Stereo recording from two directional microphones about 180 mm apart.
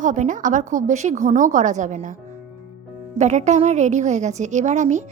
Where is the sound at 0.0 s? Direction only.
45° right (ahead or behind).